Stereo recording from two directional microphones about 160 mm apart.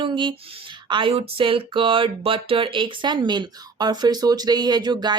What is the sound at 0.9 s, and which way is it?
Speech, 30° right (ahead or behind).